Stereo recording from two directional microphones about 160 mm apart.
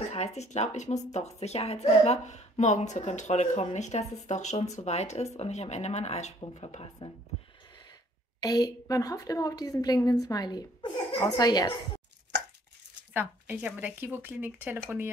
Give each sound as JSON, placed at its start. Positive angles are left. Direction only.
{"t": 0.1, "sound": "speech", "side_deg": 40}
{"t": 8.4, "sound": "a woman's voice", "side_deg": 25}
{"t": 12.3, "sound": "chopping", "side_deg": -90}
{"t": 13.1, "sound": "speech", "side_deg": -10}